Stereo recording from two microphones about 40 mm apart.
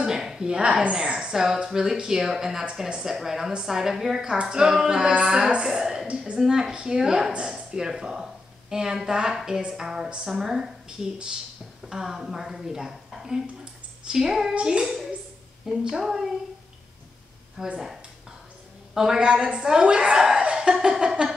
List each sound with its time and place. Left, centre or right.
0.0 s a sound: centre
1.0 s speech: right
1.3 s a woman's voice: centre
5.2 s a woman's voice: centre
6.0 s a woman's voice: right
6.4 s a woman's voice: centre
14.5 s a woman's voice: right
14.8 s a woman's voice: centre
17.6 s a woman's voice: centre
19.0 s a woman's voice: centre
20.4 s a sound: centre
21.1 s a woman's voice: centre